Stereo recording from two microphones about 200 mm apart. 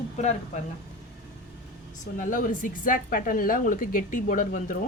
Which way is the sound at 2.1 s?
40° left (ahead or behind).